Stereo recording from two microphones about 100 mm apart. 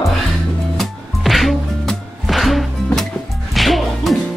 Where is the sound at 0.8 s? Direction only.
Centre (ahead or behind).